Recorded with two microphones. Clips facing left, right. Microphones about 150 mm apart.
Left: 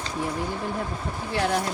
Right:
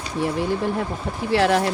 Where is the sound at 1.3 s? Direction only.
90° right.